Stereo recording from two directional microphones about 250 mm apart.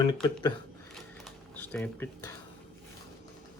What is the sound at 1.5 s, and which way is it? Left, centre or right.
Speech, centre.